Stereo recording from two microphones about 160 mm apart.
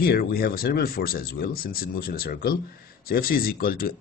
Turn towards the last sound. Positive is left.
turn(degrees=65)  # may be behind; listen again after turning